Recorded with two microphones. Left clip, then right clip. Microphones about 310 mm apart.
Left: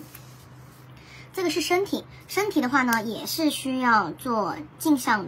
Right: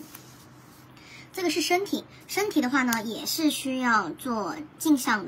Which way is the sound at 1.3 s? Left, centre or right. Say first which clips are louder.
Left 1 dB; centre.